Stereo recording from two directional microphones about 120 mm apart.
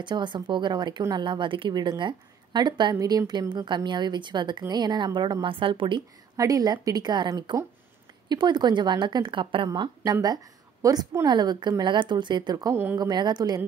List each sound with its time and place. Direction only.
0.0 s a woman's voice: 40° right (ahead or behind)
6.3 s a woman's voice: 30° right (ahead or behind)
9.7 s a woman's voice: 30° right (ahead or behind)